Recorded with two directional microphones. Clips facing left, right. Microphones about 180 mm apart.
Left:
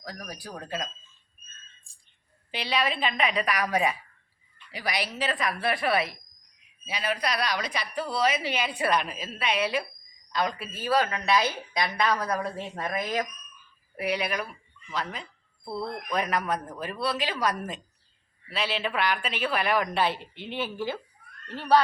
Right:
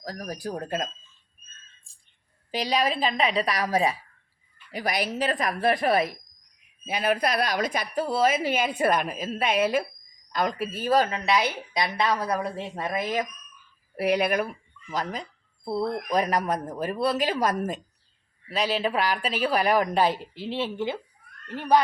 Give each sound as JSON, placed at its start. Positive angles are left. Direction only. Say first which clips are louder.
{"t": 0.0, "sound": "speech", "louder": "right 7 dB", "side_deg": -40}
{"t": 2.5, "sound": "a woman's voice", "louder": "right 3 dB", "side_deg": -40}
{"t": 4.7, "sound": "a woman's voice", "louder": "right 4 dB", "side_deg": -50}
{"t": 11.1, "sound": "a woman's voice", "louder": "right 1 dB", "side_deg": -20}
{"t": 13.9, "sound": "a woman's voice", "louder": "right 6 dB", "side_deg": -45}